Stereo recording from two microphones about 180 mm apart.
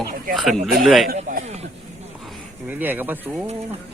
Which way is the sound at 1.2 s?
40° right (ahead or behind).